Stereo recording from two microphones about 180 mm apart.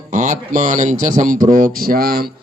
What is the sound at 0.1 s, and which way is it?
A man's voice, 45° right (ahead or behind).